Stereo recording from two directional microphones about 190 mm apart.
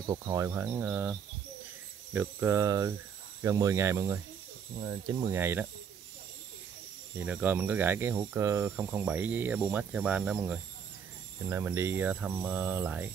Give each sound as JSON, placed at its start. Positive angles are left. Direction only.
{"t": 0.1, "sound": "speech", "side_deg": -20}
{"t": 2.1, "sound": "speech", "side_deg": -15}
{"t": 7.2, "sound": "speech", "side_deg": -10}